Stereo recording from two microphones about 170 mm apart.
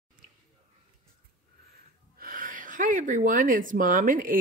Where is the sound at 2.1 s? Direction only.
55° right (ahead or behind).